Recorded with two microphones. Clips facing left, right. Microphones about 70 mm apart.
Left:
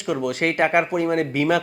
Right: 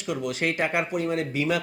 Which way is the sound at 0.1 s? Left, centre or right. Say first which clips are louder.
Left 5 dB; left.